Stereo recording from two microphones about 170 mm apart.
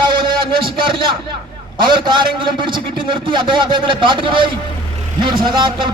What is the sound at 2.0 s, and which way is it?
A man's voice, 25° right (ahead or behind).